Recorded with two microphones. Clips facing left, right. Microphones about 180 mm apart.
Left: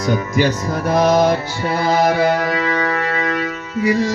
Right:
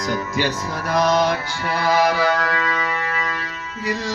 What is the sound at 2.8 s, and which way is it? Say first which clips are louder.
Music: left 6 dB; 70° left (ahead or behind).